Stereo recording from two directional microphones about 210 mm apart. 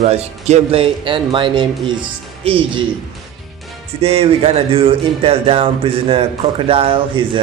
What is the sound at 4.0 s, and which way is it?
Speech, 25° right (ahead or behind).